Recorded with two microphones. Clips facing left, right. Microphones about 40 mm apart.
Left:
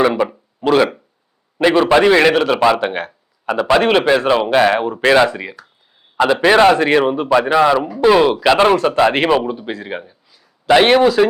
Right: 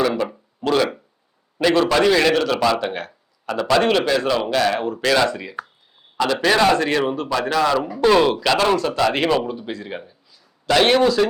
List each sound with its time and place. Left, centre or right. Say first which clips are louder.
0.2 s a man's voice: left 5 dB; centre
8.4 s a man's voice: left 6 dB; left